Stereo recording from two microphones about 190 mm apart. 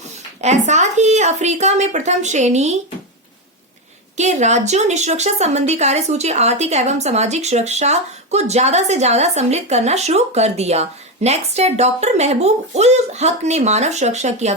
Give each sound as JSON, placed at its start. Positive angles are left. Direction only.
{"t": 0.4, "sound": "speech", "side_deg": -35}
{"t": 4.2, "sound": "a woman's voice", "side_deg": -35}